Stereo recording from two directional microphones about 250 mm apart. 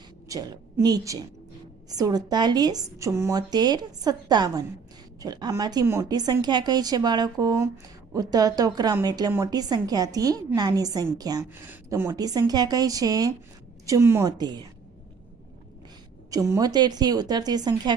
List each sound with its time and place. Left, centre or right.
0.3 s a woman's voice: centre
16.3 s a woman's voice: centre